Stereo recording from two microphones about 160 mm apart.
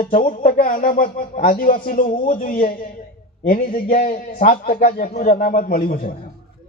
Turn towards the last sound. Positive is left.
turn(degrees=65)  # may be behind; listen again after turning